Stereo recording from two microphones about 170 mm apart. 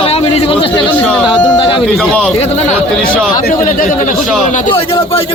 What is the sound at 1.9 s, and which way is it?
Speech, 5° left (ahead or behind).